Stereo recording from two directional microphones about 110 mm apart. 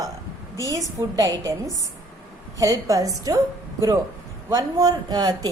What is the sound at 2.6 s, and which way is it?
Speech, 30° right (ahead or behind).